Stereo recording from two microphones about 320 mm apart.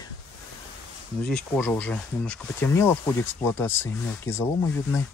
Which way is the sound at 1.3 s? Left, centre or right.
Centre.